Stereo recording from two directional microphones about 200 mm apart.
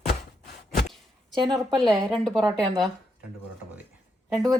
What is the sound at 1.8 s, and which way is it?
Speech, centre (ahead or behind).